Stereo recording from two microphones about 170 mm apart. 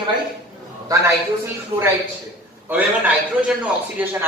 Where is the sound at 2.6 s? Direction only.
10° right (ahead or behind).